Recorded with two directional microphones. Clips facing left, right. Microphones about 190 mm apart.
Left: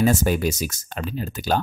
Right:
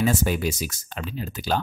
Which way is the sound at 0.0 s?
45° left (ahead or behind).